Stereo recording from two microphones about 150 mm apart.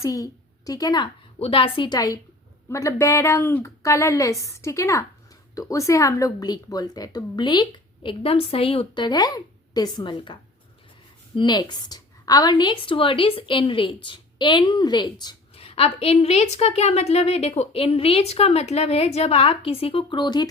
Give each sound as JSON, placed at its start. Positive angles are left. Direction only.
{"t": 0.0, "sound": "a woman's voice", "side_deg": 20}
{"t": 1.4, "sound": "a woman's voice", "side_deg": 35}
{"t": 11.3, "sound": "a woman's voice", "side_deg": 30}
{"t": 15.6, "sound": "a woman's voice", "side_deg": 40}